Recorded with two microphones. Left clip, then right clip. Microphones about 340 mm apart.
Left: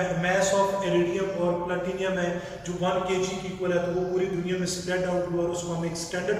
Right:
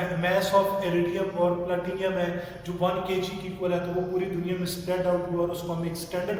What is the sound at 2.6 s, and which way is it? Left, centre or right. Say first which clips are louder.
A man's voice: left 1 dB; centre.